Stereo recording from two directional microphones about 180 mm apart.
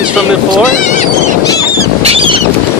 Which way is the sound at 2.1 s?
30° right (ahead or behind).